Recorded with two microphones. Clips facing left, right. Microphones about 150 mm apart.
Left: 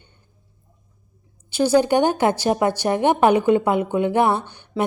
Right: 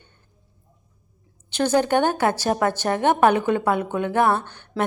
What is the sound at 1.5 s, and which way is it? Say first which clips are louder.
A woman's voice: left 3 dB; 10° left (ahead or behind).